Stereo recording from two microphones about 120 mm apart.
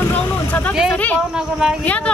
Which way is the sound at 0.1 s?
15° left (ahead or behind).